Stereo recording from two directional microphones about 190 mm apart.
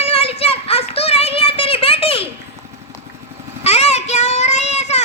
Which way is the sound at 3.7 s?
35° left (ahead or behind).